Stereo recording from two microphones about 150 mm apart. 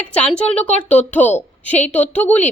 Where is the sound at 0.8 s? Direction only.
10° left (ahead or behind).